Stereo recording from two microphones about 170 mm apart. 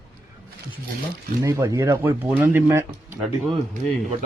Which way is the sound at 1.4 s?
20° right (ahead or behind).